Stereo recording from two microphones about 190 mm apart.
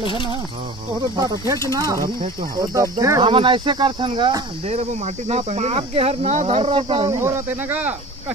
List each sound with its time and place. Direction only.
0.0 s speech: 25° left (ahead or behind)
0.9 s speech: 20° right (ahead or behind)
7.1 s speech: 15° right (ahead or behind)